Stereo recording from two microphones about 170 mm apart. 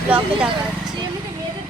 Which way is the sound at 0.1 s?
5° right (ahead or behind).